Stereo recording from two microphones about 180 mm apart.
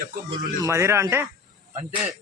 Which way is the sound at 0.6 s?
15° right (ahead or behind).